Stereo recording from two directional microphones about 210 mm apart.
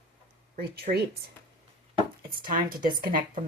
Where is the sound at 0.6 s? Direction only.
50° right (ahead or behind).